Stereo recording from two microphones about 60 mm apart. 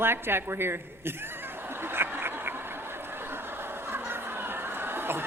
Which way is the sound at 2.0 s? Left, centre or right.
Right.